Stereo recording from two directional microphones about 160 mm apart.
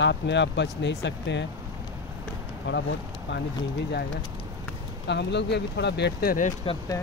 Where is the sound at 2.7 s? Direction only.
90° left.